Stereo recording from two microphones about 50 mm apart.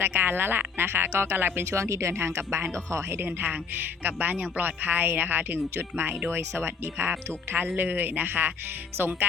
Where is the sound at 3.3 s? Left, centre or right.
Right.